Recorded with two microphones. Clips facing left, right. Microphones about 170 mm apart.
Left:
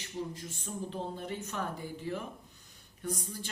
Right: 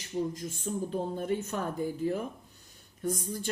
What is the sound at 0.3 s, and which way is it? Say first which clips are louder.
Speech: right 6 dB; 40° right (ahead or behind).